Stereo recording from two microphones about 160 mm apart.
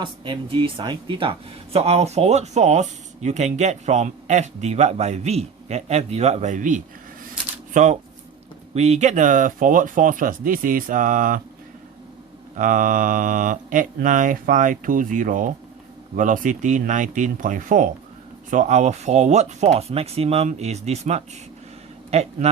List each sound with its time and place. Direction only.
0.0 s speech: 30° right (ahead or behind); by 6.8 s 55° right (ahead or behind)
7.3 s a sound: 50° right (ahead or behind)
8.7 s speech: 45° right (ahead or behind)
12.5 s speech: 55° right (ahead or behind)